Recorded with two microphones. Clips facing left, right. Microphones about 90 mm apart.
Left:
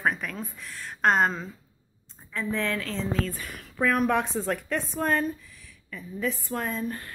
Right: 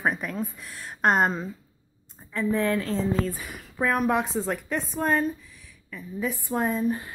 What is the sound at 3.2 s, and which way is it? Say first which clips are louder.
A woman's voice: right 3 dB; 10° right (ahead or behind).